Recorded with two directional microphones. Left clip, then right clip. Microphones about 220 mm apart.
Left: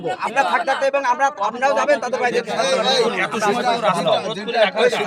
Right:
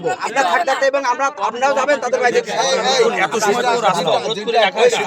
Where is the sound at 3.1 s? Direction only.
45° right (ahead or behind).